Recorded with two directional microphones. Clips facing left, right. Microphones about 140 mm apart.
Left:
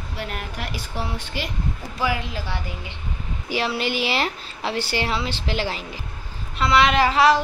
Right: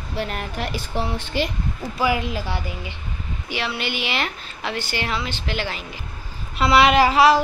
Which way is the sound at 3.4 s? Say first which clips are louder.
Left 3 dB; 35° left (ahead or behind).